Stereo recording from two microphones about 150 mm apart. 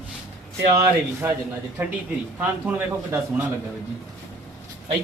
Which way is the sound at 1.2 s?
15° right (ahead or behind).